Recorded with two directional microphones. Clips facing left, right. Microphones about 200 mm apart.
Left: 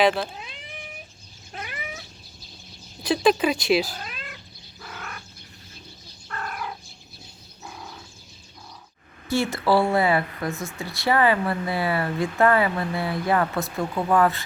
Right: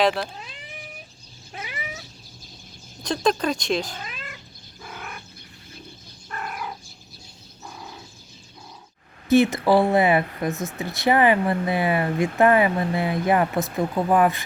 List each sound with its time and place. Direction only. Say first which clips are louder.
0.0 s speech: left 1 dB; centre (ahead or behind)
1.5 s cat: even; 5° right (ahead or behind)
3.0 s speech: left 3 dB; 5° left (ahead or behind)
4.8 s bird: right 1 dB; 10° right (ahead or behind)
6.2 s cat: even; 15° right (ahead or behind)
9.3 s speech: right 4 dB; 20° right (ahead or behind)